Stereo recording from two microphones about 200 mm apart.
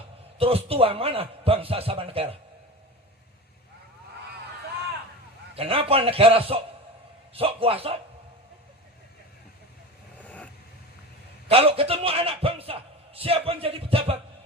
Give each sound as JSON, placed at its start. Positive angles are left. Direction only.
{"t": 0.3, "sound": "a man's voice", "side_deg": -30}
{"t": 5.5, "sound": "a man's voice", "side_deg": -30}
{"t": 10.2, "sound": "vehicle", "side_deg": 5}
{"t": 11.4, "sound": "a man's voice", "side_deg": -30}